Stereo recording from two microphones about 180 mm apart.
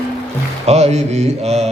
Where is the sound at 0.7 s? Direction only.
35° right (ahead or behind).